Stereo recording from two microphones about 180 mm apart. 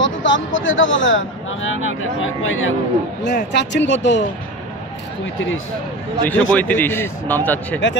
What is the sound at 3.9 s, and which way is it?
Speech, 85° left.